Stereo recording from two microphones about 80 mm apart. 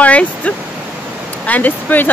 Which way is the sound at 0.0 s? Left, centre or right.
Centre.